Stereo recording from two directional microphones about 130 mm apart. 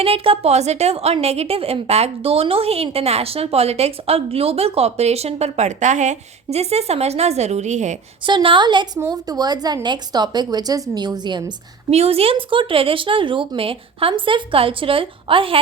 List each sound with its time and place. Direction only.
0.0 s a woman's voice: 45° right (ahead or behind); by 7.9 s 65° right (ahead or behind)
8.2 s a woman's voice: 40° right (ahead or behind)
11.9 s a woman's voice: 50° right (ahead or behind)